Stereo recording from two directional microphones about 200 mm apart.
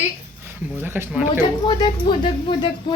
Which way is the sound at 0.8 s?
10° right (ahead or behind).